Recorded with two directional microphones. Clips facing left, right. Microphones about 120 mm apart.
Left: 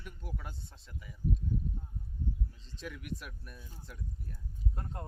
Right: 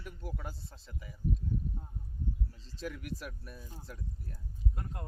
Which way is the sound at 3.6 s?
40° right (ahead or behind).